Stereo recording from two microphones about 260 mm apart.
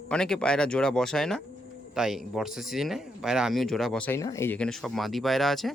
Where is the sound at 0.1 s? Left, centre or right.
Centre.